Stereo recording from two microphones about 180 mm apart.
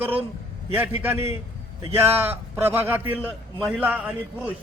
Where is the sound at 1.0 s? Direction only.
10° right (ahead or behind).